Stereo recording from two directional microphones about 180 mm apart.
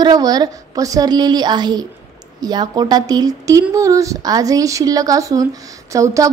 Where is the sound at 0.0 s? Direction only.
20° right (ahead or behind).